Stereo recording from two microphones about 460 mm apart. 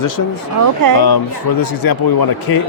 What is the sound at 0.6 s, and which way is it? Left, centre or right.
Speech, right.